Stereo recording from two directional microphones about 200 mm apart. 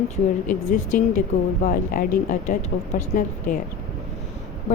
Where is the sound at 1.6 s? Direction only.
45° left (ahead or behind).